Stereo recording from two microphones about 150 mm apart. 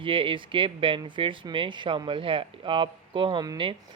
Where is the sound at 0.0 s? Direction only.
35° right (ahead or behind).